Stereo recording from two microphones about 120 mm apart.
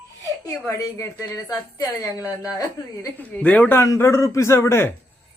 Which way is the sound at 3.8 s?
25° left (ahead or behind).